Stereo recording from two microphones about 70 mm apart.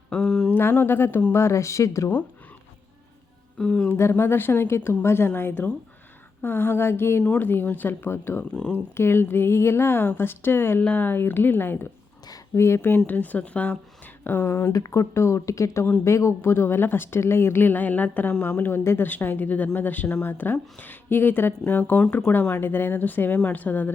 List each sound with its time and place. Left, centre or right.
0.1 s a sound: centre
0.5 s speech: left
3.6 s speech: centre
3.8 s speech: left
12.5 s speech: left
13.1 s speech: left
14.3 s speech: left
14.7 s speech: left
18.8 s speech: left
19.0 s speech: left